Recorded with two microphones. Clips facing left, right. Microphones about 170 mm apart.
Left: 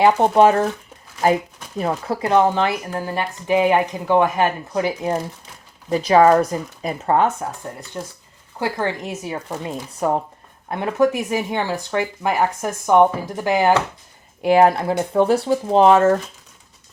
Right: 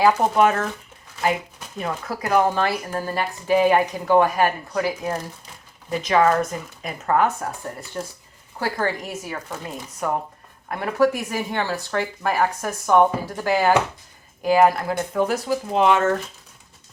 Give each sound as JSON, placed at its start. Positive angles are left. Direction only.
{"t": 0.0, "sound": "speech", "side_deg": 30}
{"t": 1.8, "sound": "speech", "side_deg": 30}
{"t": 5.9, "sound": "speech", "side_deg": 35}
{"t": 7.9, "sound": "speech", "side_deg": 10}
{"t": 10.7, "sound": "speech", "side_deg": 20}